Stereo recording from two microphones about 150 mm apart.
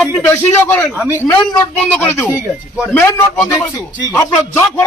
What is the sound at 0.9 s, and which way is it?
Speech, 10° right (ahead or behind).